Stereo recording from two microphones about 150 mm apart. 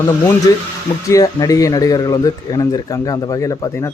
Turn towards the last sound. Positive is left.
turn(degrees=20)  # may be behind; listen again after turning